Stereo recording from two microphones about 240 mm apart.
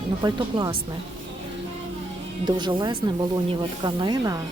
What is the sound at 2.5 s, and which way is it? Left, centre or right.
Speech, centre.